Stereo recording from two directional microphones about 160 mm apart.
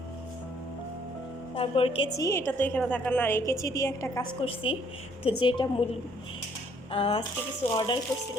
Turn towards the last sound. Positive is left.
turn(degrees=30)  # may be behind; listen again after turning